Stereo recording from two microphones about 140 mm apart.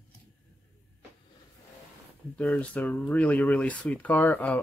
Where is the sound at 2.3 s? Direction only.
10° left (ahead or behind).